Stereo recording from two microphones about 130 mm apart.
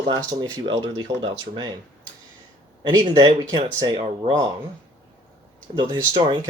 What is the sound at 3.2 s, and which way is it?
Speech, 45° right (ahead or behind).